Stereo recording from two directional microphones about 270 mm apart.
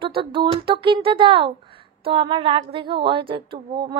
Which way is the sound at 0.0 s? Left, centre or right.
Centre.